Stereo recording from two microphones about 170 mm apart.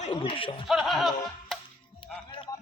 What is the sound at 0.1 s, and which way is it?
Speech, 30° left (ahead or behind).